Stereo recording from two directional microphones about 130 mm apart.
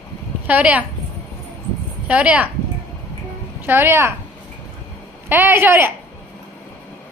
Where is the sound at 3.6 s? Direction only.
15° right (ahead or behind).